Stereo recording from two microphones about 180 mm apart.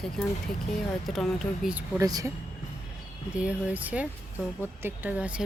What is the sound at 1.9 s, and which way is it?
Speech, 20° right (ahead or behind).